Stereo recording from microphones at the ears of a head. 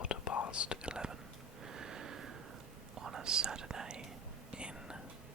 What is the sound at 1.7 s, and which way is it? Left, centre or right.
Sniff, right.